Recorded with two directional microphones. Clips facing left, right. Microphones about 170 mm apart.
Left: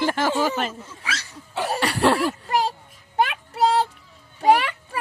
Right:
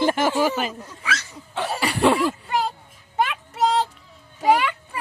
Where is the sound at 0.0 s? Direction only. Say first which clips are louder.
Right 2 dB; 20° right (ahead or behind).